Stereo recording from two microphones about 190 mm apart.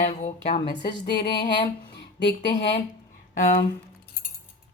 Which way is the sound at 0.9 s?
25° left (ahead or behind).